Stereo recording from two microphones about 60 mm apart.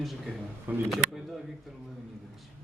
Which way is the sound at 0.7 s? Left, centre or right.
Right.